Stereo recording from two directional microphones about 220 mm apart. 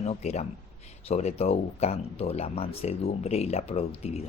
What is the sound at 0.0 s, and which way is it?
Speech, 30° left (ahead or behind).